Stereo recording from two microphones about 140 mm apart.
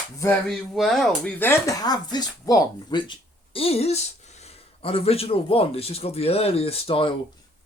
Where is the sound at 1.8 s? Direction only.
30° left (ahead or behind).